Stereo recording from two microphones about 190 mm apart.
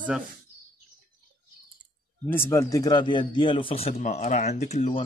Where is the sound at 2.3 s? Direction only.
10° left (ahead or behind); by 5.0 s 35° left (ahead or behind).